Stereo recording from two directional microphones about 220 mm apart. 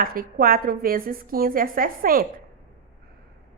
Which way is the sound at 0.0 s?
40° right (ahead or behind).